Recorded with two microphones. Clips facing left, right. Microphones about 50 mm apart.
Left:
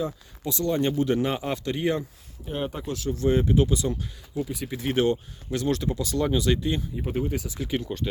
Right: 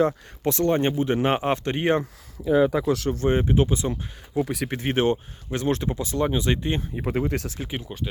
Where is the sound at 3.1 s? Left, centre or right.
Right.